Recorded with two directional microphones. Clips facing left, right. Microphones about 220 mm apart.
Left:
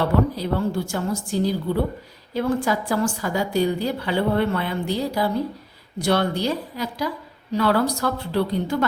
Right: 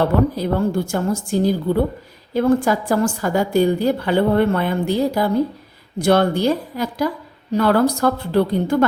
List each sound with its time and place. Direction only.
0.3 s a woman's voice: 50° right (ahead or behind)